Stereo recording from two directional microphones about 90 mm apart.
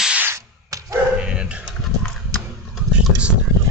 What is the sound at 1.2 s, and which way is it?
Dog, 10° right (ahead or behind).